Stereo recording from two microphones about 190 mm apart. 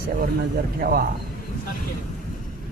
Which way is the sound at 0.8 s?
50° right (ahead or behind).